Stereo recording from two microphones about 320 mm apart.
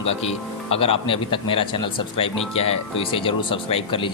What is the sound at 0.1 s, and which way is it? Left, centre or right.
Speech, centre.